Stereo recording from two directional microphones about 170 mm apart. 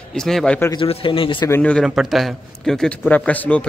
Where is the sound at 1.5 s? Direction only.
5° left (ahead or behind).